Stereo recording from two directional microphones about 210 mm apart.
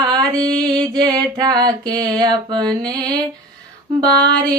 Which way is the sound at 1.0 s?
20° right (ahead or behind).